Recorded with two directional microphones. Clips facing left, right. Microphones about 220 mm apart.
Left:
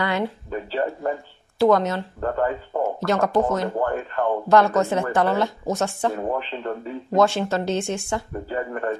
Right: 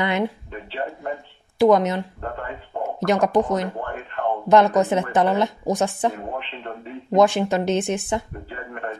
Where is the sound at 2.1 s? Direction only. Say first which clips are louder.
Left 8 dB; 45° left (ahead or behind).